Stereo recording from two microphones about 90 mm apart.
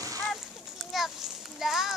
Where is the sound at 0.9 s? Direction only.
5° right (ahead or behind).